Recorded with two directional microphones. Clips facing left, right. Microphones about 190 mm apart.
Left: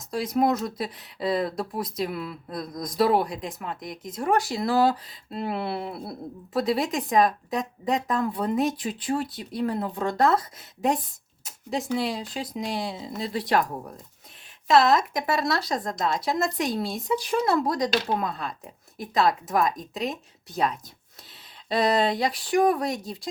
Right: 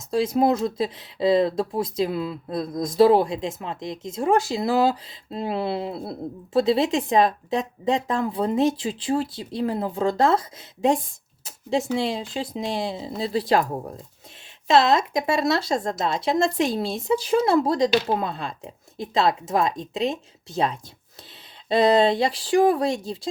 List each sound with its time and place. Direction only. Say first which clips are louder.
0.1 s speech: right 3 dB; 30° right (ahead or behind)